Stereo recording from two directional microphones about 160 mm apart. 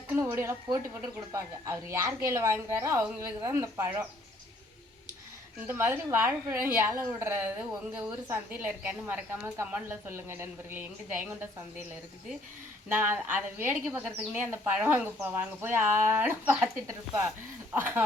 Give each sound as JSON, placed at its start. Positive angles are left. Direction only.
{"t": 0.1, "sound": "a woman's voice", "side_deg": -15}
{"t": 5.6, "sound": "a woman's voice", "side_deg": -15}
{"t": 12.9, "sound": "a woman's voice", "side_deg": -15}
{"t": 17.7, "sound": "a woman's voice", "side_deg": -10}